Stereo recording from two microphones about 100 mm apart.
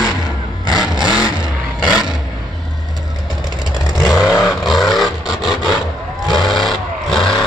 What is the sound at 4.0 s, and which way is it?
Vehicle, 35° left (ahead or behind).